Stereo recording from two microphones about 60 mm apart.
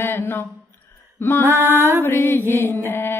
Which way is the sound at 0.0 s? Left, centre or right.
Left.